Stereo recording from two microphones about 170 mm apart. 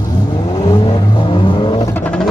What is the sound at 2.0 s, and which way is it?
Music, 5° left (ahead or behind).